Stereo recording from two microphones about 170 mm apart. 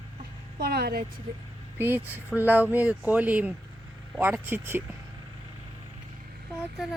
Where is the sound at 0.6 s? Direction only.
65° right (ahead or behind).